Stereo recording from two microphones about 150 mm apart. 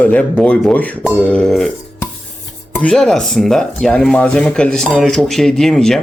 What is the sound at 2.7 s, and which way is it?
Speech, 5° left (ahead or behind).